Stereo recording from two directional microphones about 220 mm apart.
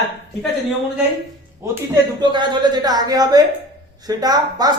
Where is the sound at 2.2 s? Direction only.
20° right (ahead or behind).